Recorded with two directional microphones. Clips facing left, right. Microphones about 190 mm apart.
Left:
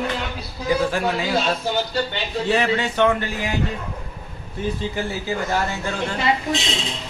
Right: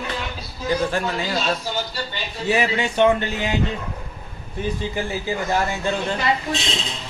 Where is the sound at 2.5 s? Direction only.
10° right (ahead or behind).